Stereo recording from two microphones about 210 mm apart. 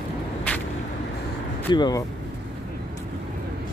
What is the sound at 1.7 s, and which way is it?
Speech, 20° left (ahead or behind).